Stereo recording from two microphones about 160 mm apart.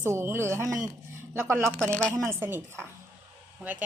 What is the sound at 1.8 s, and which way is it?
Speech, 5° left (ahead or behind).